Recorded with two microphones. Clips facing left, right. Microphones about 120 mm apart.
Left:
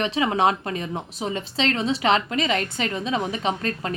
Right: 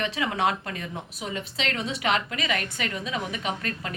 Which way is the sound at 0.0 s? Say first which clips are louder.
Left 5 dB; 25° left (ahead or behind).